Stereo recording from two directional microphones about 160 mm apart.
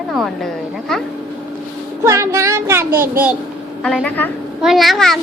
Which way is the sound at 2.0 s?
20° right (ahead or behind).